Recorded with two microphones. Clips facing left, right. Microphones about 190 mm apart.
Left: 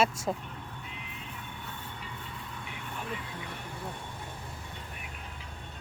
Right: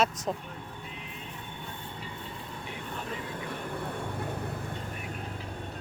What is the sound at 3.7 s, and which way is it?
Vehicle, 60° right (ahead or behind).